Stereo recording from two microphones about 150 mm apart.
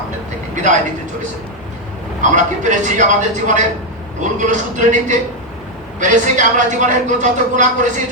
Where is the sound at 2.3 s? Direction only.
55° right (ahead or behind).